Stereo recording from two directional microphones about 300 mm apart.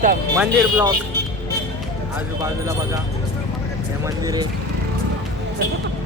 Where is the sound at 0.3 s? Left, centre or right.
Centre.